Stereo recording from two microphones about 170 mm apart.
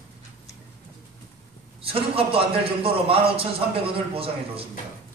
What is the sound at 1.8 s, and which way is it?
A man's voice, 35° right (ahead or behind).